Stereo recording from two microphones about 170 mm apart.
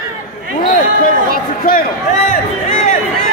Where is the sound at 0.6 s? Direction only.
60° left (ahead or behind).